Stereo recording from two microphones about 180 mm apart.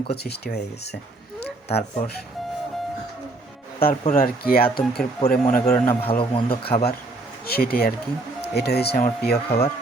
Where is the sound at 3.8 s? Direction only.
30° left (ahead or behind).